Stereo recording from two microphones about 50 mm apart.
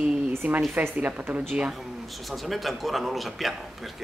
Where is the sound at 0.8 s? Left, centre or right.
Right.